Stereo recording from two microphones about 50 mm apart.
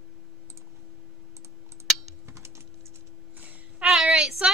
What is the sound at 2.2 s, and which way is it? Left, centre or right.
Typing, right.